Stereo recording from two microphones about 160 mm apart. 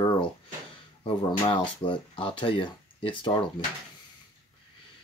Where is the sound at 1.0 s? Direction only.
30° left (ahead or behind).